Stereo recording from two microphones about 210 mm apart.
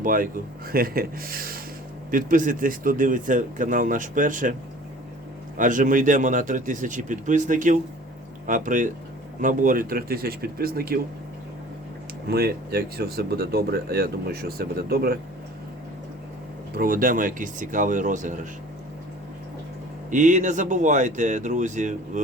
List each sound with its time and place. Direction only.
0.0 s speech: 40° right (ahead or behind)
5.5 s speech: 40° right (ahead or behind)
12.3 s speech: 50° right (ahead or behind)
16.7 s speech: 45° right (ahead or behind)
20.1 s speech: 35° right (ahead or behind)